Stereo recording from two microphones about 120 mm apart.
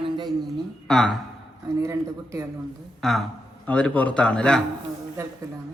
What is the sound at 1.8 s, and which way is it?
Speech, 25° right (ahead or behind).